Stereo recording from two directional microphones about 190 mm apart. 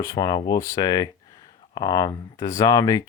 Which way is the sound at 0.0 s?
20° left (ahead or behind).